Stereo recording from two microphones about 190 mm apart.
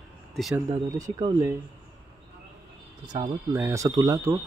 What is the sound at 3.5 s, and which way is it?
Speech, 10° right (ahead or behind).